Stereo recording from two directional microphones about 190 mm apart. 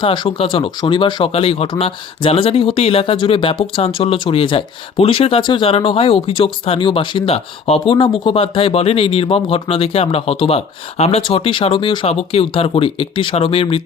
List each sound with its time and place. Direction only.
0.0 s speech: 25° left (ahead or behind)